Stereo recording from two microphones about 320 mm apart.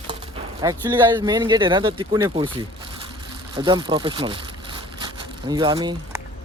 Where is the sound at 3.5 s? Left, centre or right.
Centre.